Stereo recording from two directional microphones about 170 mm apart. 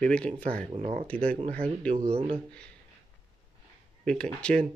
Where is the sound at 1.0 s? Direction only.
10° left (ahead or behind).